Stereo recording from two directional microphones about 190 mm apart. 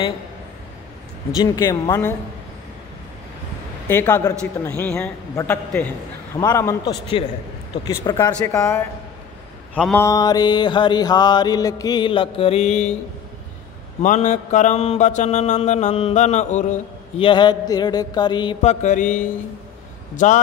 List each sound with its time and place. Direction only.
1.4 s mantra: 20° left (ahead or behind)
3.8 s a man's voice: 10° left (ahead or behind)
6.3 s mantra: 15° left (ahead or behind)
8.2 s a man's voice: 15° left (ahead or behind)
10.0 s mantra: 20° left (ahead or behind); by 12.9 s 35° left (ahead or behind)
14.0 s mantra: 40° left (ahead or behind)
17.3 s mantra: 25° left (ahead or behind); by 20.4 s 40° left (ahead or behind)